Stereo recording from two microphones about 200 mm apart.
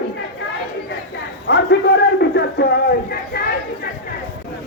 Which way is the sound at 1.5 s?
55° left (ahead or behind).